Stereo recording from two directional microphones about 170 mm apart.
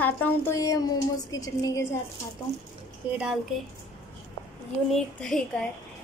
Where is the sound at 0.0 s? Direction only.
10° left (ahead or behind).